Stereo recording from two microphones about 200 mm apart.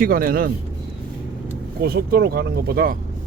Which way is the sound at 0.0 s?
45° right (ahead or behind).